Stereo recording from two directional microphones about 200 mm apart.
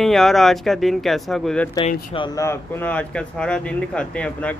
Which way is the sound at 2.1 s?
25° left (ahead or behind).